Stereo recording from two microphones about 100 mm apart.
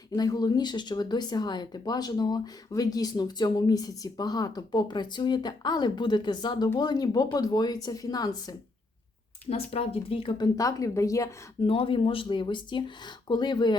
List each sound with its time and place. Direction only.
0.2 s speech: 40° left (ahead or behind)
9.5 s speech: 80° left
10.3 s speech: 40° left (ahead or behind)
11.6 s speech: 65° left (ahead or behind); by 13.7 s 50° left (ahead or behind)